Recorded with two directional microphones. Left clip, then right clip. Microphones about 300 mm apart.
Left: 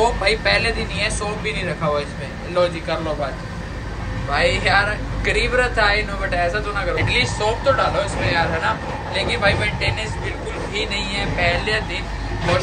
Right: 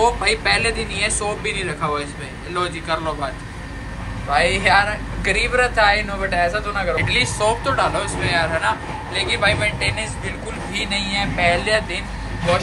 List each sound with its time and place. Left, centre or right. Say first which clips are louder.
0.0 s speech: even; centre
4.3 s a man's voice: right 2 dB; centre